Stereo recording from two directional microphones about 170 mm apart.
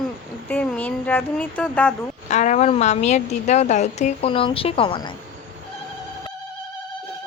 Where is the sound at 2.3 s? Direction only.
45° left (ahead or behind); by 5.1 s 30° left (ahead or behind).